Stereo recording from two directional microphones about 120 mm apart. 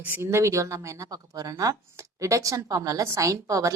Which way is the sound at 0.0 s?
20° right (ahead or behind).